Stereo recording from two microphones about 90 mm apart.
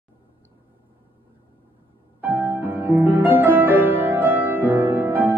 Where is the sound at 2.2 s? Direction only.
20° right (ahead or behind).